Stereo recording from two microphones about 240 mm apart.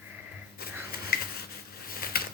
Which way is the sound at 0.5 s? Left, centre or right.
Left.